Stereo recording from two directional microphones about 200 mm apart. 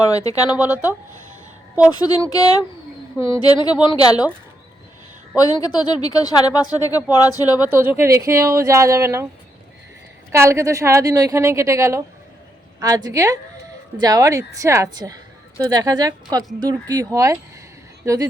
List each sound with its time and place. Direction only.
0.0 s speech: 15° left (ahead or behind)
0.5 s a woman's voice: 10° right (ahead or behind)
1.9 s speech: 20° left (ahead or behind)
3.2 s a woman's voice: 15° right (ahead or behind)
3.4 s speech: 20° left (ahead or behind)
5.4 s speech: 20° left (ahead or behind)
7.7 s a woman's voice: 10° right (ahead or behind)
10.3 s a woman's voice: 15° right (ahead or behind)